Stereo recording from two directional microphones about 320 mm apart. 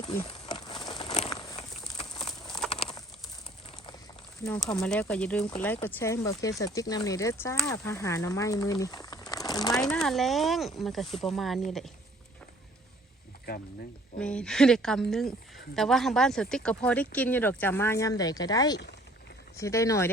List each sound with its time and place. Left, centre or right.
0.0 s a sound: centre
0.8 s crumpling: centre
2.0 s a sound: centre
2.6 s bird: centre
4.4 s speech: centre
14.2 s speech: centre